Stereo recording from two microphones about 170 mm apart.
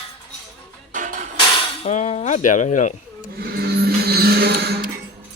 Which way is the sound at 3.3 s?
65° right (ahead or behind).